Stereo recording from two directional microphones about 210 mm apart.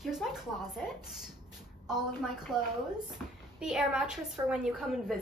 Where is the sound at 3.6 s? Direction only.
5° right (ahead or behind).